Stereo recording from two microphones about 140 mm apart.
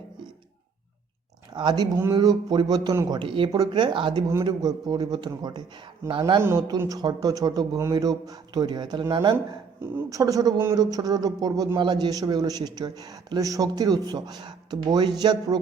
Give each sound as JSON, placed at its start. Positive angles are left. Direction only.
{"t": 1.5, "sound": "a man's voice", "side_deg": -30}
{"t": 3.2, "sound": "a man's voice", "side_deg": -35}
{"t": 6.4, "sound": "speech", "side_deg": -20}